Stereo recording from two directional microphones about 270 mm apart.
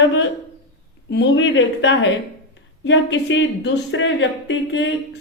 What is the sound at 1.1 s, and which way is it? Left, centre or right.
A woman's voice, left.